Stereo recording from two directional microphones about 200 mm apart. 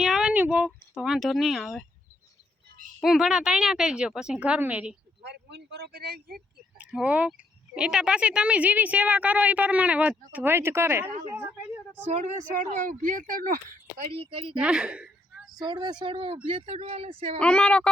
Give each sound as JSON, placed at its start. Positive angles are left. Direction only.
{"t": 0.0, "sound": "speech", "side_deg": 0}
{"t": 3.0, "sound": "speech", "side_deg": 0}
{"t": 5.2, "sound": "speech", "side_deg": -55}
{"t": 6.7, "sound": "speech", "side_deg": -5}
{"t": 12.0, "sound": "speech", "side_deg": -35}
{"t": 14.1, "sound": "speech", "side_deg": -25}
{"t": 14.5, "sound": "a woman's voice", "side_deg": -5}
{"t": 15.5, "sound": "speech", "side_deg": -20}
{"t": 17.4, "sound": "speech", "side_deg": 5}